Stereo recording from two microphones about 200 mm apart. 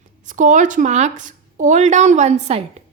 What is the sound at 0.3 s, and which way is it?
A woman's voice, 40° right (ahead or behind).